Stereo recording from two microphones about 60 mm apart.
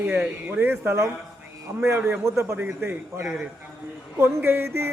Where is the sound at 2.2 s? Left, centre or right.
Right.